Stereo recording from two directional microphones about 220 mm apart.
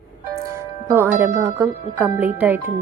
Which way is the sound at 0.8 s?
10° right (ahead or behind).